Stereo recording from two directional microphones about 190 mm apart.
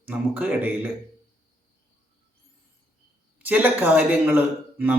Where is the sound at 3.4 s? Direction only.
10° right (ahead or behind).